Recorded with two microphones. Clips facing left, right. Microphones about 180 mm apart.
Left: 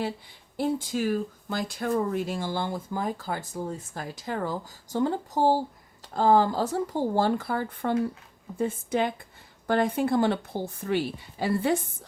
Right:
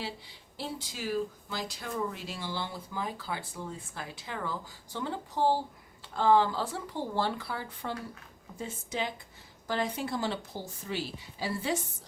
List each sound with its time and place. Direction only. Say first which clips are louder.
0.5 s speech: left 12 dB; 50° left (ahead or behind)